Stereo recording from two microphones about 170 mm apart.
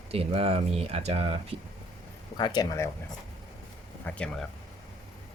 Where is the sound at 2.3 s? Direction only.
25° left (ahead or behind).